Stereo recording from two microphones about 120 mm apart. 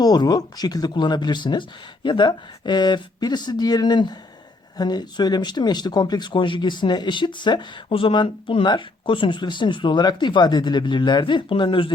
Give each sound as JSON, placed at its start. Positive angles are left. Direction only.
{"t": 0.0, "sound": "speech", "side_deg": 35}